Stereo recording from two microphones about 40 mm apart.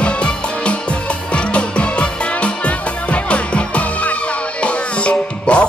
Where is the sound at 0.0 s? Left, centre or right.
Left.